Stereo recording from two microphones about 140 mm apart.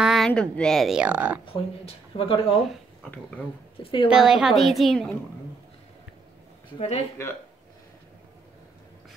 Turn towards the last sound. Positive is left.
turn(degrees=20)  # may be behind; listen again after turning